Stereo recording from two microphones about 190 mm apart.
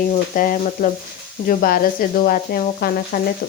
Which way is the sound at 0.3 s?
45° left (ahead or behind).